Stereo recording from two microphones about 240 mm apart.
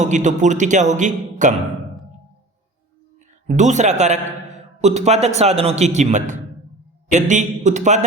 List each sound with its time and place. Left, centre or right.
0.0 s a man's voice: right
3.4 s a man's voice: right